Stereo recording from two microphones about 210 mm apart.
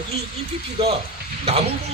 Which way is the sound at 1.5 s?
30° right (ahead or behind).